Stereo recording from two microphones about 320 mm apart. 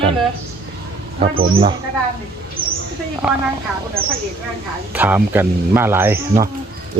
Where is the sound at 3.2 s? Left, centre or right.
Centre.